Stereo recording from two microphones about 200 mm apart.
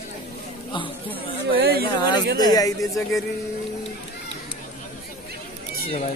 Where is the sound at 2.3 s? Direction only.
20° left (ahead or behind).